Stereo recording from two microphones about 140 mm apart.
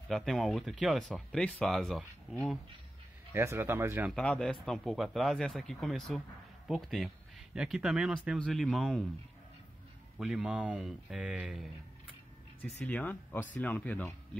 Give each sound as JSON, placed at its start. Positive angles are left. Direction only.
{"t": 0.1, "sound": "speech", "side_deg": 0}
{"t": 3.3, "sound": "speech", "side_deg": -15}
{"t": 4.1, "sound": "speech", "side_deg": 5}
{"t": 10.1, "sound": "speech", "side_deg": -5}
{"t": 12.7, "sound": "speech", "side_deg": 10}